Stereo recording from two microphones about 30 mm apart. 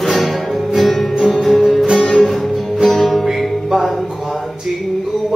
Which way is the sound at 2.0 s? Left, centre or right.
Centre.